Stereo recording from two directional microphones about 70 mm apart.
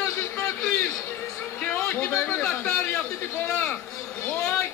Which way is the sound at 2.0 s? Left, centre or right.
Left.